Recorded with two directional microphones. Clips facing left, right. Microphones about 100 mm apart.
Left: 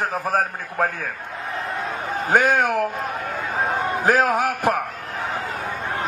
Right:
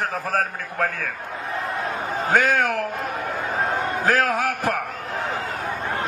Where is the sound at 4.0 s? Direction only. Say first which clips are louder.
Left 3 dB; 20° left (ahead or behind).